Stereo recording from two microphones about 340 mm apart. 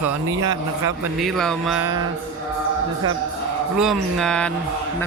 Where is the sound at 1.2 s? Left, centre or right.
Centre.